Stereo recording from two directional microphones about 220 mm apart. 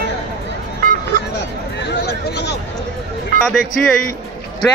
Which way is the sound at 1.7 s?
50° left (ahead or behind).